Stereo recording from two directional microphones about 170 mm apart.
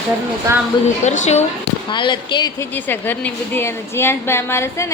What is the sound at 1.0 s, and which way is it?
Speech, 45° left (ahead or behind).